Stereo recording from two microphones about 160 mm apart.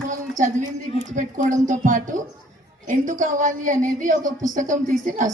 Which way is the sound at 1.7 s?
55° right (ahead or behind).